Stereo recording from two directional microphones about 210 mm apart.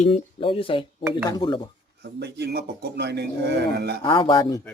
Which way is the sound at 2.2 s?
50° right (ahead or behind).